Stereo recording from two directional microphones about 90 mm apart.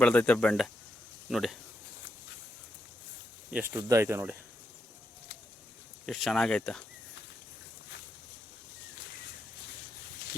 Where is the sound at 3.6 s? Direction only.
30° right (ahead or behind).